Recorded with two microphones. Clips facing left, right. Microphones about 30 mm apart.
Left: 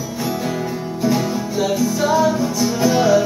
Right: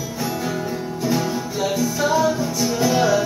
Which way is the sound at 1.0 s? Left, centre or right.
Centre.